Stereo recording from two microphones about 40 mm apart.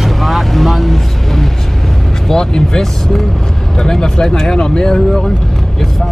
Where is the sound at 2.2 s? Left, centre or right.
Centre.